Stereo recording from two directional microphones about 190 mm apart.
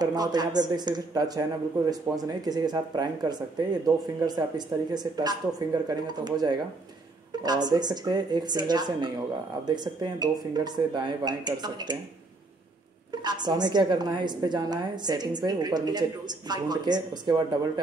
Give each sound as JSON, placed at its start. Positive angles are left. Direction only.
{"t": 0.0, "sound": "a woman's voice", "side_deg": -20}
{"t": 13.2, "sound": "a woman's voice", "side_deg": -20}